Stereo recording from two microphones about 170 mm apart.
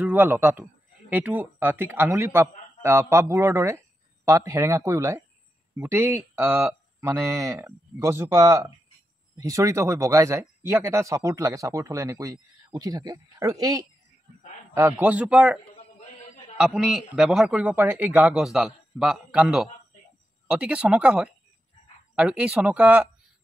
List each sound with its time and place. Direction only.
0.0 s a man's voice: 10° right (ahead or behind)